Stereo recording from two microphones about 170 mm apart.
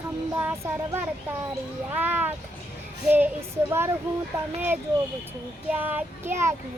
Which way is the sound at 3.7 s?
15° right (ahead or behind).